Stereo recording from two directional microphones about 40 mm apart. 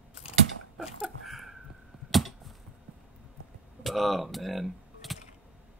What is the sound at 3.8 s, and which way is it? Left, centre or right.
Typing, centre.